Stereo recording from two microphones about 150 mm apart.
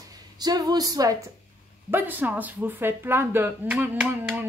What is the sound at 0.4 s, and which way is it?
Speech, 25° right (ahead or behind).